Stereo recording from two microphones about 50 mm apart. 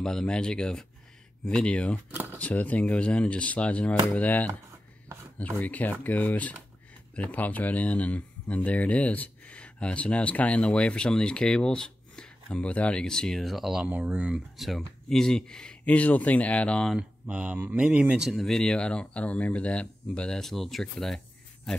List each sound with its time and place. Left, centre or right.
0.0 s speech: centre; by 4.5 s left
5.6 s speech: left; by 13.7 s centre
13.8 s speech: right
14.6 s speech: centre
15.0 s speech: centre
15.8 s speech: left
17.3 s speech: right
18.4 s speech: centre
20.2 s speech: centre